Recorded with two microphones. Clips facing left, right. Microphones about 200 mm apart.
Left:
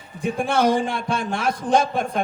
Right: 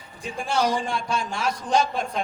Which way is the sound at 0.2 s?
55° left (ahead or behind).